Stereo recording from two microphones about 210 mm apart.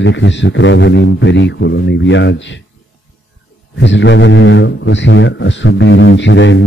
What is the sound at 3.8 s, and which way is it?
A man's voice, 60° left (ahead or behind).